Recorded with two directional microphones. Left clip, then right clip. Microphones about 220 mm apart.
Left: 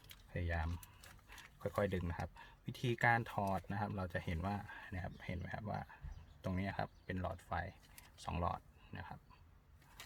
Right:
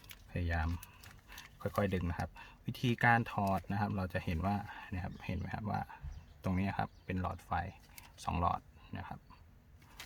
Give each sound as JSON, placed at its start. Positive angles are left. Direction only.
{"t": 0.3, "sound": "speech", "side_deg": -10}